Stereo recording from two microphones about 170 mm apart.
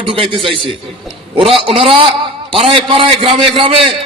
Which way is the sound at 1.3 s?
30° right (ahead or behind).